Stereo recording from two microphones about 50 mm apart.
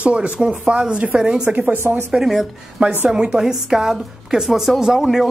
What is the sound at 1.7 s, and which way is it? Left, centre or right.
Speech, right.